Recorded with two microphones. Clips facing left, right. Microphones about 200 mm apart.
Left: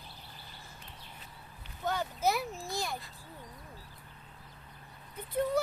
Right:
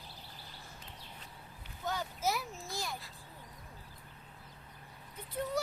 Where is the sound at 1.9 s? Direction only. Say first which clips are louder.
Left 4 dB; 60° left (ahead or behind).